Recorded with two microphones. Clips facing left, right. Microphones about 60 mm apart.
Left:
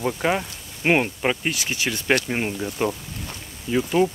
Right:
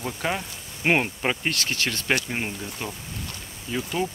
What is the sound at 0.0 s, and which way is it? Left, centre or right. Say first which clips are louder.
Speech: left 5 dB; centre.